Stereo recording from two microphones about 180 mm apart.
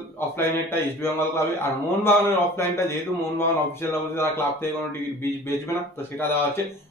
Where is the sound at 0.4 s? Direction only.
15° left (ahead or behind).